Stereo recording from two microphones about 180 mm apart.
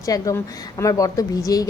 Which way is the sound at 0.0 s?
20° left (ahead or behind).